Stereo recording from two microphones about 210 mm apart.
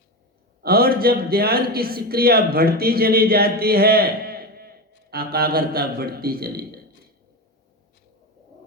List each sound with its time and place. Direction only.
0.6 s a man's voice: 45° right (ahead or behind)